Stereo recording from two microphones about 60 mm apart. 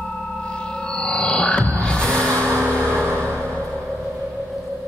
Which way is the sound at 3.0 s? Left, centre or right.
Right.